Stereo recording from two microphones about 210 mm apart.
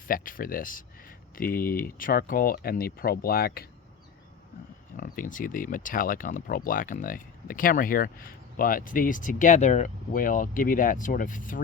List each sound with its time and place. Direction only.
0.1 s speech: 40° left (ahead or behind)
4.9 s speech: 40° left (ahead or behind)